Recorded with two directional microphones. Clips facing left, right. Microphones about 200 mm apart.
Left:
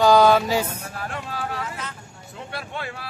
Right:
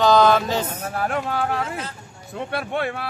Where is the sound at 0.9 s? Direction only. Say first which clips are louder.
Right 9 dB; 60° right (ahead or behind).